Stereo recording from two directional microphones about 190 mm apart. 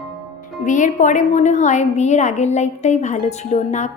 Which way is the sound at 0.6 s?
40° left (ahead or behind).